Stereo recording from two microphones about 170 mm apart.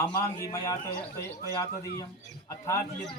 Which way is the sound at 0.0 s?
20° left (ahead or behind).